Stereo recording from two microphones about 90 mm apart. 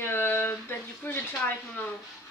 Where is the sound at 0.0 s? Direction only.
25° left (ahead or behind).